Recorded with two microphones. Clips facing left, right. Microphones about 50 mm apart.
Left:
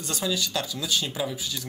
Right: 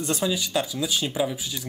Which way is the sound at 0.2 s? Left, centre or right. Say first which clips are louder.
Left 1 dB; centre.